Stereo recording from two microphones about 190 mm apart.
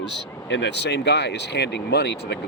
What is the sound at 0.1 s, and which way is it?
Speech, 65° left (ahead or behind).